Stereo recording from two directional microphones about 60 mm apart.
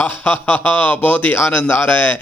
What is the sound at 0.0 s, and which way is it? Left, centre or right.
Speech, left.